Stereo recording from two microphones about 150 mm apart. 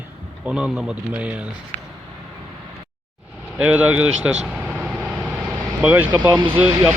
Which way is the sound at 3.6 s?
10° right (ahead or behind).